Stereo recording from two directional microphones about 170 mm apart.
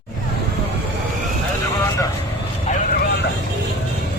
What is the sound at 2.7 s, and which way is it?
Vehicle, 50° left (ahead or behind).